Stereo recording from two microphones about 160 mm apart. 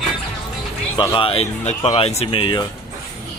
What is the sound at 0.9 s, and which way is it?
Speech, 30° left (ahead or behind).